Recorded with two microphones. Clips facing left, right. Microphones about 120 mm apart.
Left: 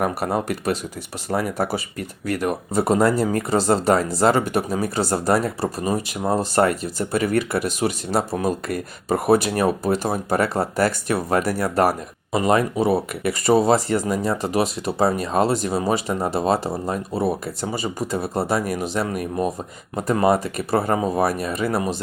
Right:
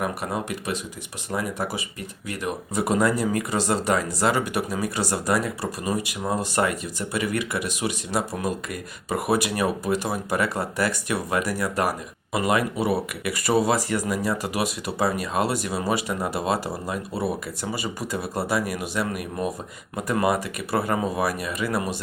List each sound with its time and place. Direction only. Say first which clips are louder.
0.0 s speech: left 5 dB; 40° left (ahead or behind)
2.7 s speech: left 4 dB; 35° left (ahead or behind)
9.4 s speech: left 4 dB; 30° left (ahead or behind)